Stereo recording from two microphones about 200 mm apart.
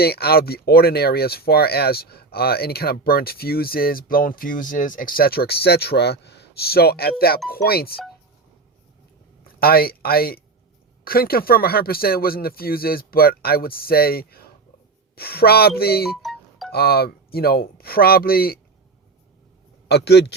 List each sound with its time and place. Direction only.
0.0 s speech: 50° left (ahead or behind)
9.6 s speech: 50° left (ahead or behind)
16.0 s music: centre (ahead or behind)
16.7 s speech: 50° left (ahead or behind)
19.9 s a man's voice: 55° left (ahead or behind)